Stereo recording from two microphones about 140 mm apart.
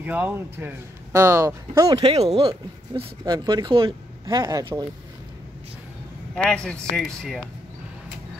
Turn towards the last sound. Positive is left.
turn(degrees=5)  # may be behind; listen again after turning